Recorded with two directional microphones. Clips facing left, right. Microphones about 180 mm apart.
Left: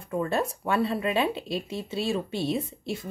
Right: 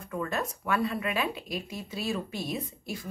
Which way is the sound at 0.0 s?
30° left (ahead or behind).